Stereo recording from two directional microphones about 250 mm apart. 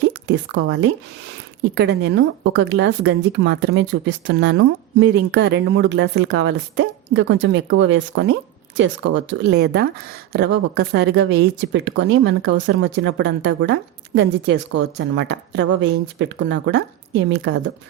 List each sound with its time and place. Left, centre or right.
0.0 s speech: right
14.8 s speech: right